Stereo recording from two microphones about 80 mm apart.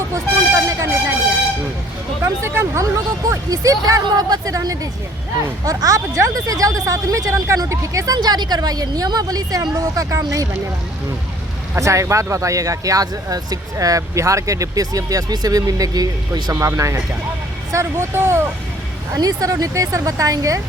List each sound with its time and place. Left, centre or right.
0.1 s a sound: right
2.2 s speech: right
11.8 s speech: right
19.1 s speech: right